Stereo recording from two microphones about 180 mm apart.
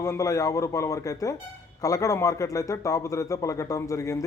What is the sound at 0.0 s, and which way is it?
Speech, 20° left (ahead or behind).